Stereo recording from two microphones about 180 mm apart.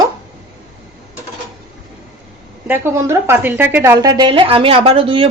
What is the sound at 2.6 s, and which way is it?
A woman's voice, 10° right (ahead or behind).